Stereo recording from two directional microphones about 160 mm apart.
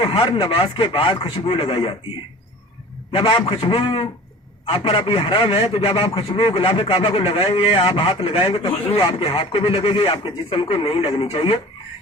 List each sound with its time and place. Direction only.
0.0 s a man's voice: 35° left (ahead or behind)
3.1 s a man's voice: 35° left (ahead or behind)